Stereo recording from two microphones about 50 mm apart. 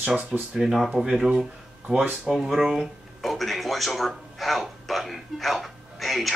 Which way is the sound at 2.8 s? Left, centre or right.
Centre.